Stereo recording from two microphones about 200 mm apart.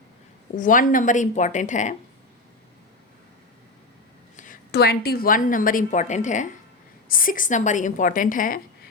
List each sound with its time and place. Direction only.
0.5 s a woman's voice: 40° left (ahead or behind)
4.4 s a woman's voice: 45° left (ahead or behind)